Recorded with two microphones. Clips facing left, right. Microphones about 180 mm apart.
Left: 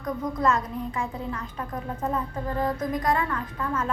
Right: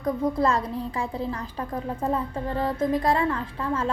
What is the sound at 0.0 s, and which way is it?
A woman's voice, 30° right (ahead or behind).